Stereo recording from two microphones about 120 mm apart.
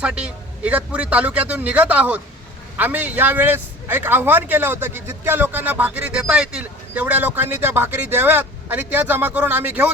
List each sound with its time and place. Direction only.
0.0 s a man's voice: 10° right (ahead or behind)